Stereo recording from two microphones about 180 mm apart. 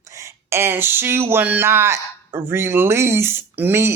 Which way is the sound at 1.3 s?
10° right (ahead or behind).